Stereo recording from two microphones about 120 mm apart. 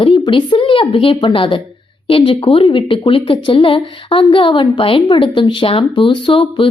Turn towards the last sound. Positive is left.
turn(degrees=45)  # may be behind; listen again after turning